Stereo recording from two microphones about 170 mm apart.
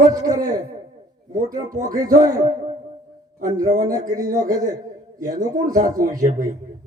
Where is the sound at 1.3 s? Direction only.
20° right (ahead or behind).